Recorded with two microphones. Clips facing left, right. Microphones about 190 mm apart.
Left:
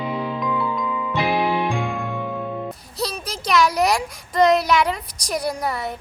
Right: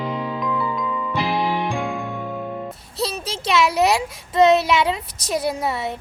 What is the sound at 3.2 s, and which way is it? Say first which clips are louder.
A child's voice: left 1 dB; 25° right (ahead or behind).